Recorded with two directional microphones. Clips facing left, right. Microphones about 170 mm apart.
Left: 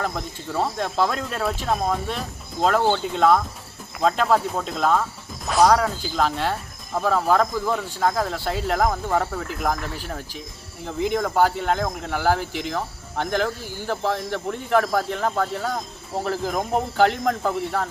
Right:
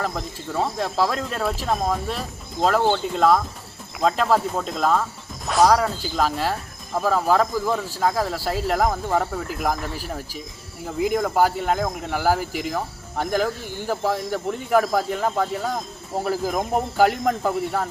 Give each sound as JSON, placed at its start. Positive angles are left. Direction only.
{"t": 0.0, "sound": "speech", "side_deg": 0}